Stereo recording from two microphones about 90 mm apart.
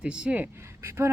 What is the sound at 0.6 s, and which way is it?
Speech, 30° right (ahead or behind).